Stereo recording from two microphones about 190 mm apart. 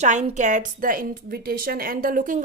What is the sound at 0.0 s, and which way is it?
A woman's voice, 35° right (ahead or behind).